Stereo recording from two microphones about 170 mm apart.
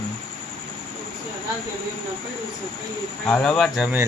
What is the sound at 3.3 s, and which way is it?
Speech, 5° left (ahead or behind).